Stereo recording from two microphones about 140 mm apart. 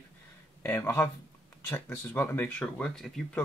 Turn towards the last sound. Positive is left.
turn(degrees=5)  # may be behind; listen again after turning